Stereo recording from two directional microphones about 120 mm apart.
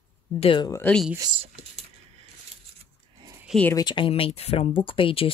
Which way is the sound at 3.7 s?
40° left (ahead or behind).